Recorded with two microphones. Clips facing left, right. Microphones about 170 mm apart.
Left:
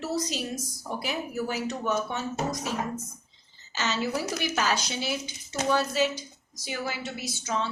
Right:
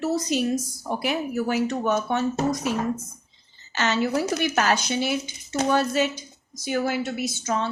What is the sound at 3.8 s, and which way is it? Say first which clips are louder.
A woman's voice: right 6 dB; 60° right (ahead or behind).